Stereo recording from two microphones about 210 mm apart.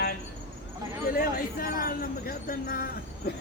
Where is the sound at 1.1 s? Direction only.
45° left (ahead or behind).